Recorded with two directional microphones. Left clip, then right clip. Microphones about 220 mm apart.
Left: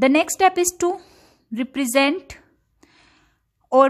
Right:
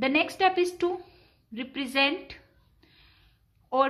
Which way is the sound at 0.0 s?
50° left (ahead or behind).